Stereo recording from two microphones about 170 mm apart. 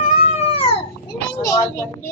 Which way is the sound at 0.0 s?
40° left (ahead or behind).